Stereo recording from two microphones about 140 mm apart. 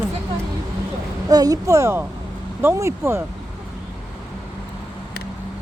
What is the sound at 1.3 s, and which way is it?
Speech, 25° right (ahead or behind).